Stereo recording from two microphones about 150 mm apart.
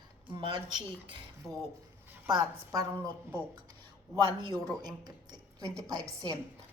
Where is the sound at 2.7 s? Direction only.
25° right (ahead or behind).